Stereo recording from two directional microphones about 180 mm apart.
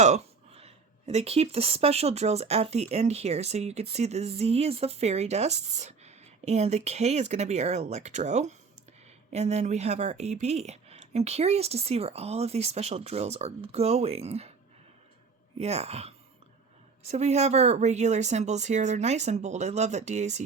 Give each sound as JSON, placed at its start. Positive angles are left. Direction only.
{"t": 0.0, "sound": "speech", "side_deg": -35}
{"t": 15.5, "sound": "speech", "side_deg": -35}